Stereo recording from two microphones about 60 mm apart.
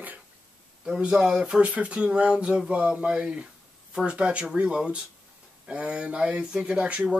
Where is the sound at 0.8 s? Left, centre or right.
Centre.